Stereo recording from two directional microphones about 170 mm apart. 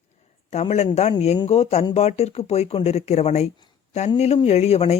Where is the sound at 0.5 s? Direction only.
40° left (ahead or behind).